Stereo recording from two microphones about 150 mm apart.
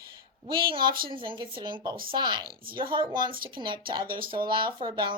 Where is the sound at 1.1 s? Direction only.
35° right (ahead or behind).